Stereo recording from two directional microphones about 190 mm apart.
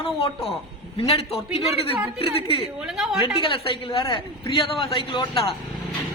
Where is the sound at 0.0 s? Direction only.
30° left (ahead or behind).